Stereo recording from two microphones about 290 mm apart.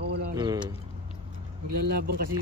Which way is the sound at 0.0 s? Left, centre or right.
Right.